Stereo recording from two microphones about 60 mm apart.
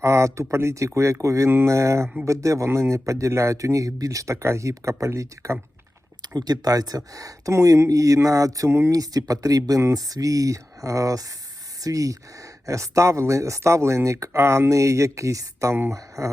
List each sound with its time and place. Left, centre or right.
0.0 s speech: right
2.6 s speech: right
6.3 s speech: right
7.5 s speech: right
8.9 s speech: right
9.9 s speech: right
15.7 s speech: right
16.0 s speech: right